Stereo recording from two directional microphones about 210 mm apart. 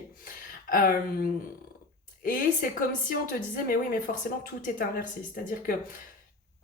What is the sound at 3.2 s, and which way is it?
Speech, 40° left (ahead or behind).